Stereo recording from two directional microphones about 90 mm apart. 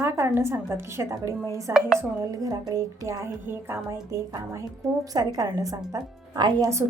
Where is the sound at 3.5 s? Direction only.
25° right (ahead or behind).